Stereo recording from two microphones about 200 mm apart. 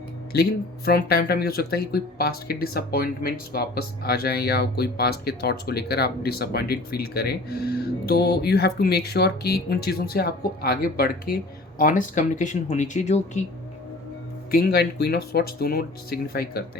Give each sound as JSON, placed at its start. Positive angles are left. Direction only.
{"t": 0.3, "sound": "speech", "side_deg": 55}
{"t": 14.5, "sound": "speech", "side_deg": 50}